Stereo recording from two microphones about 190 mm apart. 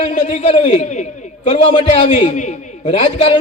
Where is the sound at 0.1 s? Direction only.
35° left (ahead or behind).